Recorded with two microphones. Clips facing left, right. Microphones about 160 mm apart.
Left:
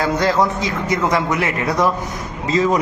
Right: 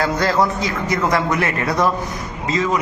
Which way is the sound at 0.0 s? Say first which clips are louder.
Left 1 dB; 15° left (ahead or behind).